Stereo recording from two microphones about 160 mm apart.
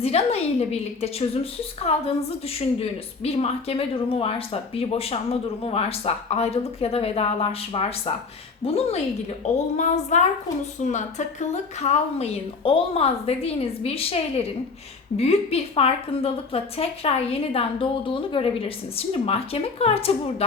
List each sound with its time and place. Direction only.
0.0 s a woman's voice: 40° left (ahead or behind)
3.2 s a woman's voice: 40° left (ahead or behind)